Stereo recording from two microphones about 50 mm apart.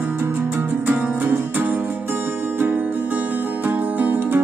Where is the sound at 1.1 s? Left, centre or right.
Right.